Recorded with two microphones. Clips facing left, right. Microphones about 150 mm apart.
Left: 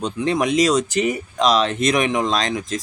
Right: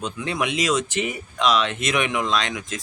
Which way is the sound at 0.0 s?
35° left (ahead or behind).